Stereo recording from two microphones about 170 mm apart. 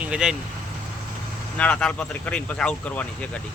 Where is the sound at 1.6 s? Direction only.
5° left (ahead or behind).